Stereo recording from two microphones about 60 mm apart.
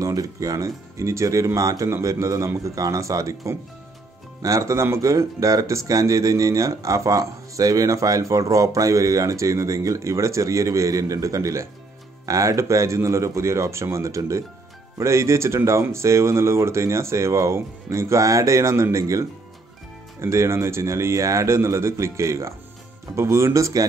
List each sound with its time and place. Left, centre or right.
0.0 s speech: right